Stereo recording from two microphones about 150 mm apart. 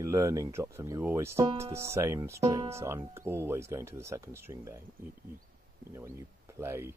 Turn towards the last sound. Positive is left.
turn(degrees=-15)  # may be behind; listen again after turning